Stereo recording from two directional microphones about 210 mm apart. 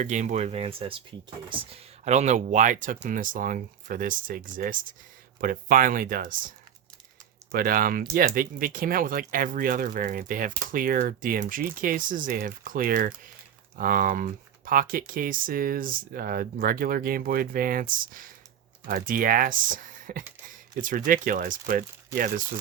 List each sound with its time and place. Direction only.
0.0 s speech: 35° right (ahead or behind)
7.5 s speech: 45° right (ahead or behind)